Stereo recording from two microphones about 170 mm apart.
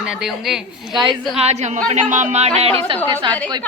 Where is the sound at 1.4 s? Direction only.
40° right (ahead or behind).